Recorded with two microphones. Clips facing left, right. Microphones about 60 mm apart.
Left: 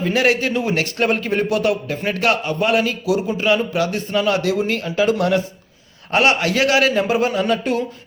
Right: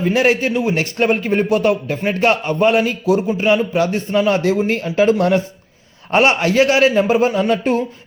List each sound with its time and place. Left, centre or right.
0.0 s speech: right